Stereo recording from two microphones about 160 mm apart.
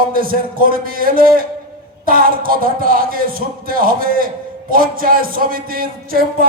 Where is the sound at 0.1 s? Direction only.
65° right (ahead or behind).